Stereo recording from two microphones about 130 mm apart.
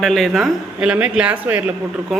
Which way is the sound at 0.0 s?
Centre (ahead or behind).